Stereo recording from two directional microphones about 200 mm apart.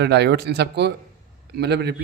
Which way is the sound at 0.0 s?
55° right (ahead or behind).